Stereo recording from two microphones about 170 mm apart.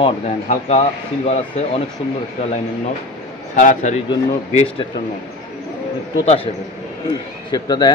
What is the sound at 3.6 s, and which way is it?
Speech, 45° left (ahead or behind).